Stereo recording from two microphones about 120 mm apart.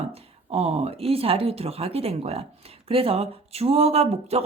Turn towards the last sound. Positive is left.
turn(degrees=-60)  # may be behind; listen again after turning